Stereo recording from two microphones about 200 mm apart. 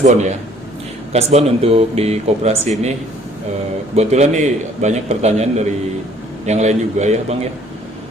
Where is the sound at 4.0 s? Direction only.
35° right (ahead or behind).